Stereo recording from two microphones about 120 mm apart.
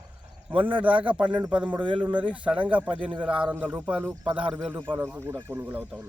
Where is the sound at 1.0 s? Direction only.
10° right (ahead or behind).